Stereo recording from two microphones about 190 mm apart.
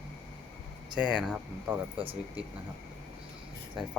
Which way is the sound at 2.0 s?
30° right (ahead or behind).